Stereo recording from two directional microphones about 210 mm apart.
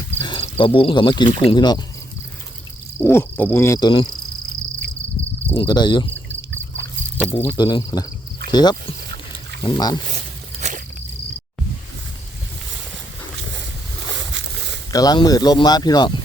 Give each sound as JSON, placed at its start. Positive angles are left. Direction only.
{"t": 0.2, "sound": "cricket", "side_deg": 25}
{"t": 3.0, "sound": "cricket", "side_deg": 10}
{"t": 5.5, "sound": "speech", "side_deg": 20}
{"t": 6.8, "sound": "a sound", "side_deg": 10}
{"t": 7.4, "sound": "speech", "side_deg": 20}
{"t": 10.6, "sound": "walk", "side_deg": -35}
{"t": 14.2, "sound": "a sound", "side_deg": -60}
{"t": 14.9, "sound": "speech", "side_deg": 20}